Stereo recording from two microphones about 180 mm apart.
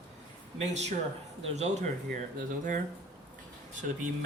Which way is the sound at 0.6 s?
40° right (ahead or behind).